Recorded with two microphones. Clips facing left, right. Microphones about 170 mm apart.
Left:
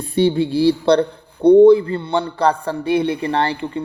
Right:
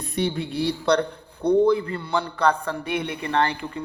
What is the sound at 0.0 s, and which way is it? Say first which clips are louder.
A man's voice: left 9 dB; 30° left (ahead or behind).